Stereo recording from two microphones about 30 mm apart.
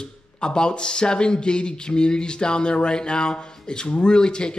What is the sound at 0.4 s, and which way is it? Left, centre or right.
Speech, left.